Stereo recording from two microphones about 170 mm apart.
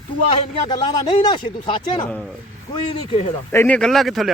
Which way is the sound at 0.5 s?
25° left (ahead or behind).